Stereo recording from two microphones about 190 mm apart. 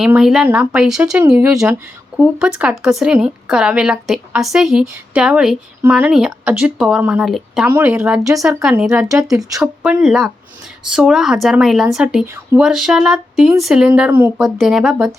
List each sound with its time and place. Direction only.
0.0 s speech: 5° right (ahead or behind)
9.3 s speech: 20° right (ahead or behind)
9.6 s speech: 5° right (ahead or behind)